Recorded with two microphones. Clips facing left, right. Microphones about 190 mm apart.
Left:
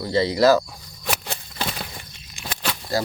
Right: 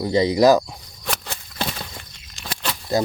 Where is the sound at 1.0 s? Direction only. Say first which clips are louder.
Left 1 dB; 5° left (ahead or behind).